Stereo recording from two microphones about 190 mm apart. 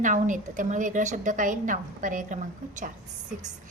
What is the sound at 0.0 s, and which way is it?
A woman's voice, 40° right (ahead or behind).